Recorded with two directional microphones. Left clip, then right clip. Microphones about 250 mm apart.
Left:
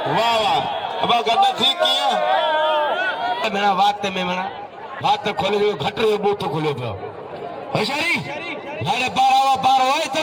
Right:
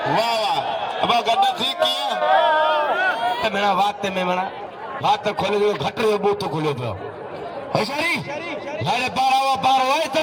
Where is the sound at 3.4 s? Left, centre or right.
Right.